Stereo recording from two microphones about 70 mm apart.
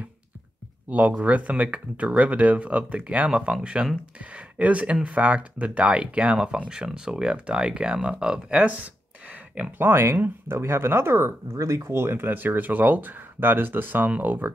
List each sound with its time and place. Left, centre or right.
0.8 s speech: right
9.7 s speech: right